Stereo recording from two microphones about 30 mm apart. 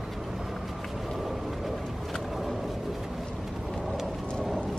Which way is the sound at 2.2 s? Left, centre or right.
Centre.